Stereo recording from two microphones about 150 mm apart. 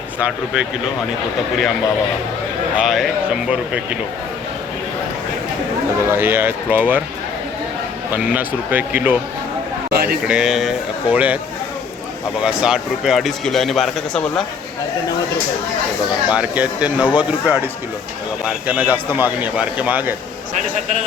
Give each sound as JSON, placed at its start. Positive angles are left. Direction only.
{"t": 2.7, "sound": "a man's voice", "side_deg": 0}
{"t": 6.1, "sound": "a man's voice", "side_deg": -15}
{"t": 8.1, "sound": "a man's voice", "side_deg": -10}
{"t": 9.9, "sound": "a sound", "side_deg": -90}
{"t": 10.2, "sound": "speech", "side_deg": -5}
{"t": 12.4, "sound": "speech", "side_deg": -5}
{"t": 16.3, "sound": "a man's voice", "side_deg": -10}